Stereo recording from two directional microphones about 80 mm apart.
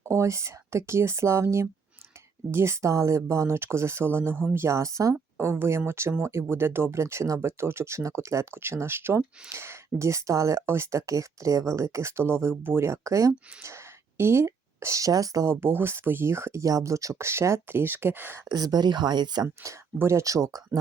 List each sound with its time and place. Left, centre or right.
0.0 s speech: right
5.1 s speech: right
15.6 s speech: right
18.4 s speech: right
19.6 s speech: right